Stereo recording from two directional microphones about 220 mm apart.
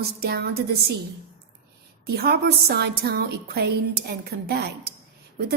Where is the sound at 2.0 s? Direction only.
45° right (ahead or behind).